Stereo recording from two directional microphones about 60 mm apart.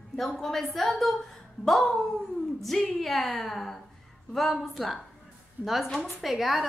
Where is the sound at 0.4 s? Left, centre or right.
Centre.